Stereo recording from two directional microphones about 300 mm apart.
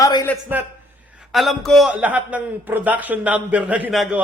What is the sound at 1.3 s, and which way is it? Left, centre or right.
A man's voice, centre.